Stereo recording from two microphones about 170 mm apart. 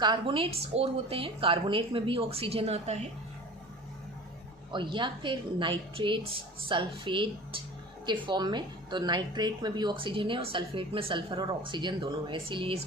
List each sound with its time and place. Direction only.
0.0 s a woman's voice: 30° right (ahead or behind)
4.7 s a woman's voice: 30° right (ahead or behind)